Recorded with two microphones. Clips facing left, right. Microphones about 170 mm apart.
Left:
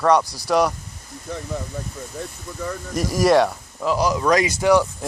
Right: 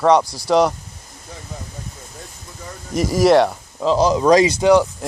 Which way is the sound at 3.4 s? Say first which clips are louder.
Right 3 dB; 20° right (ahead or behind).